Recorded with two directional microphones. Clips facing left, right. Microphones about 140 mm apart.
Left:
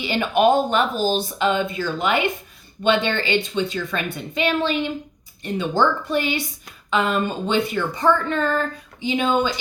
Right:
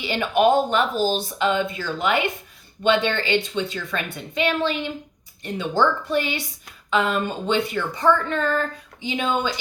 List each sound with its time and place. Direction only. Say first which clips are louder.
0.0 s a woman's voice: left 1 dB; 20° left (ahead or behind)